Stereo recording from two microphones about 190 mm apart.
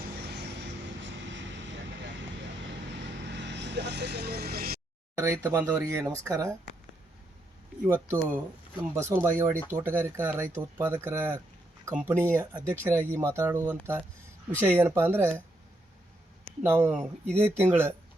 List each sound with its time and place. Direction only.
0.2 s vehicle: 60° right (ahead or behind)
3.0 s vehicle: 70° right (ahead or behind)
5.1 s speech: 15° right (ahead or behind)
7.9 s speech: 10° right (ahead or behind)
16.6 s speech: 10° right (ahead or behind)